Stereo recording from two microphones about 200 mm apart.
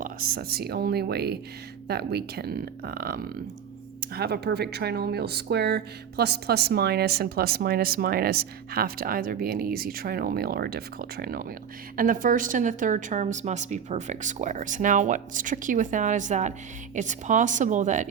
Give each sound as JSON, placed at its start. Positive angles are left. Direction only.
{"t": 0.0, "sound": "a woman's voice", "side_deg": -45}